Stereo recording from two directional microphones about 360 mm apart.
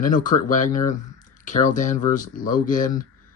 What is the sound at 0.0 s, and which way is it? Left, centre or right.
Speech, left.